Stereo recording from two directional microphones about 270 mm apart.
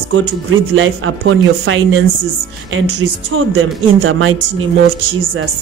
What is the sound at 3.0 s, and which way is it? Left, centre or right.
Speech, right.